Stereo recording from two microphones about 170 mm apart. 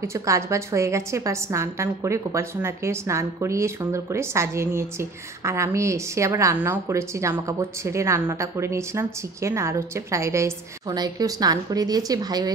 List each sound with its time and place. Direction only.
0.0 s a woman's voice: 15° right (ahead or behind)